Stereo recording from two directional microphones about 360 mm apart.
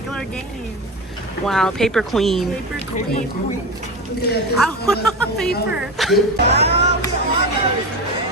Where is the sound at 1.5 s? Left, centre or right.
Centre.